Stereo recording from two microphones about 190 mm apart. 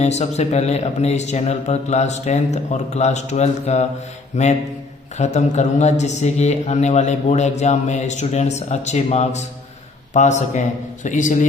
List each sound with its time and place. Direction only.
0.0 s speech: 35° left (ahead or behind)